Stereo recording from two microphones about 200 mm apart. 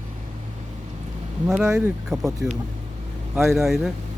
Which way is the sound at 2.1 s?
Centre (ahead or behind).